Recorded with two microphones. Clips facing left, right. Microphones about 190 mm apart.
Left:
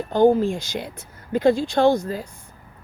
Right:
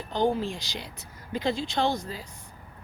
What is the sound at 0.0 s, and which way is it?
Speech, 50° left (ahead or behind).